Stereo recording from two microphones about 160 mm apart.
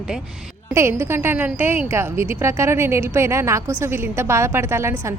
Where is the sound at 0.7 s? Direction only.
15° right (ahead or behind).